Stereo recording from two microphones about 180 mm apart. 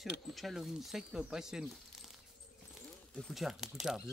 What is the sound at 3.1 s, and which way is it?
Speech, centre (ahead or behind).